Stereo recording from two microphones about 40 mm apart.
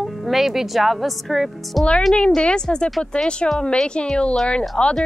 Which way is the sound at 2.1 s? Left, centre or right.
Left.